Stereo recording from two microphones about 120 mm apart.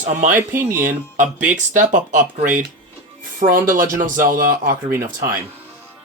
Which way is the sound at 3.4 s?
50° right (ahead or behind).